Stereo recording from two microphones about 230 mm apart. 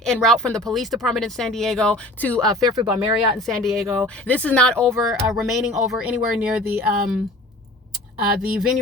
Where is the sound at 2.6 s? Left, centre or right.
Centre.